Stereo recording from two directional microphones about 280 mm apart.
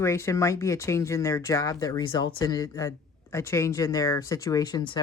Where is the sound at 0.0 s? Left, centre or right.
Centre.